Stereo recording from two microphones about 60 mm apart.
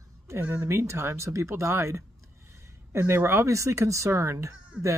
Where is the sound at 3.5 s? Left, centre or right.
Right.